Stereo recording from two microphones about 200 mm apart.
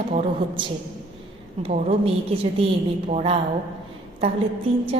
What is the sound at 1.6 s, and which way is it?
A woman's voice, 30° right (ahead or behind).